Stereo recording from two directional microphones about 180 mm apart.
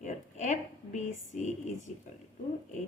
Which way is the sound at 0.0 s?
40° left (ahead or behind).